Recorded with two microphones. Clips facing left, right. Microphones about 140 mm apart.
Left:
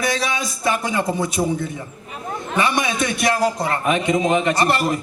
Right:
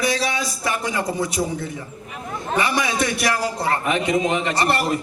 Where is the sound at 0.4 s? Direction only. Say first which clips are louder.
Left 3 dB; 25° left (ahead or behind).